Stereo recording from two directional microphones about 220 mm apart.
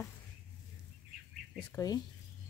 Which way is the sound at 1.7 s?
15° left (ahead or behind).